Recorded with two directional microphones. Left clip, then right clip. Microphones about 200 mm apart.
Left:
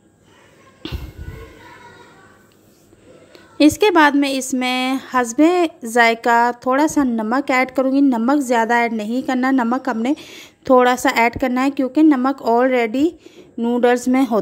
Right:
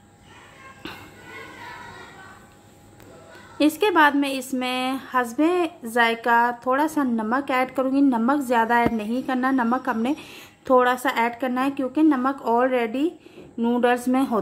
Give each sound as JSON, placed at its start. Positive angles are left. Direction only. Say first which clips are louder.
{"t": 0.8, "sound": "music", "louder": "left 5 dB", "side_deg": 30}
{"t": 3.5, "sound": "a woman's voice", "louder": "left 6 dB", "side_deg": 35}